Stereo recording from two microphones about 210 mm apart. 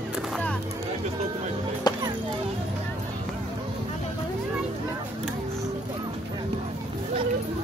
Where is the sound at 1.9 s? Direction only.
20° left (ahead or behind).